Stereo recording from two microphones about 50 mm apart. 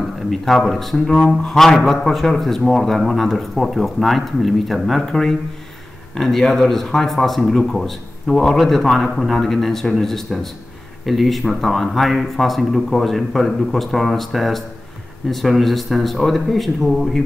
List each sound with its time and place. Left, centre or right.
0.3 s speech: centre